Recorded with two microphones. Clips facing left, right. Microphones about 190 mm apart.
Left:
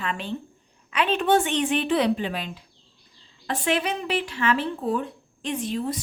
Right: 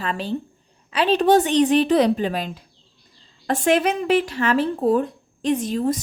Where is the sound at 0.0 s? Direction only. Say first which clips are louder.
Right 4 dB; 35° right (ahead or behind).